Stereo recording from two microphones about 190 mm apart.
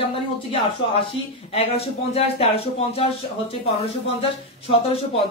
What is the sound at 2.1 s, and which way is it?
Speech, 30° left (ahead or behind).